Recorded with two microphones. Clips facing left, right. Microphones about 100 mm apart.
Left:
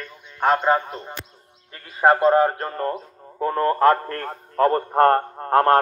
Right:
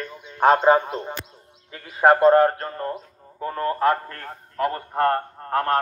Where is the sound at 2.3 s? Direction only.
10° left (ahead or behind).